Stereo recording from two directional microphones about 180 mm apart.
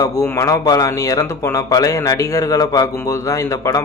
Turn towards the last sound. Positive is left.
turn(degrees=15)  # may be behind; listen again after turning